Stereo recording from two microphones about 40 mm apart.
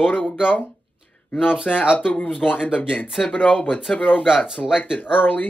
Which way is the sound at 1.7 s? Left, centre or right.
Left.